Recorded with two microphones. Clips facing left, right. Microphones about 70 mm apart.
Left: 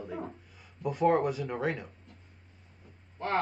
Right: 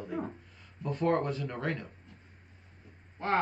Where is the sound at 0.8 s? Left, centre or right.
Centre.